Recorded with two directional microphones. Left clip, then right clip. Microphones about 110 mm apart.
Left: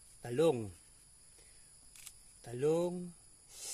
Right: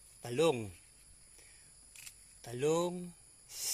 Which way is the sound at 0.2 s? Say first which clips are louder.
Even; 40° left (ahead or behind).